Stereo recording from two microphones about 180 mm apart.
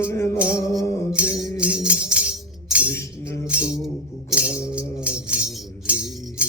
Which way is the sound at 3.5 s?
5° right (ahead or behind).